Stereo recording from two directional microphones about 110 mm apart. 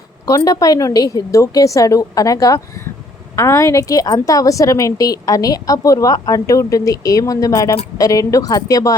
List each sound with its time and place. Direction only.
0.3 s a woman's voice: 30° left (ahead or behind)